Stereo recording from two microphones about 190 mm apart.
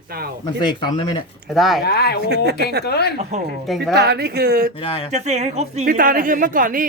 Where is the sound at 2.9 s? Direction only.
60° left (ahead or behind).